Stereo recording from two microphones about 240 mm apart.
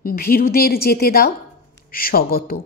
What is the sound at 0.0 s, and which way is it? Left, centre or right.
A woman's voice, left.